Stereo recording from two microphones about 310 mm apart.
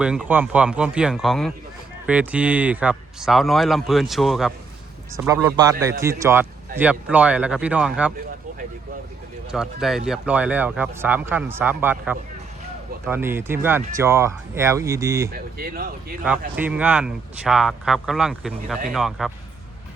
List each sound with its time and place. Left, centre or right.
0.0 s a man's voice: centre
9.5 s a man's voice: centre
15.3 s speech: right
16.6 s a man's voice: centre